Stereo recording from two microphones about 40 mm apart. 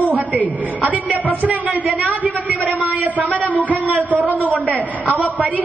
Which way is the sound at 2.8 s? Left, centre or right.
Right.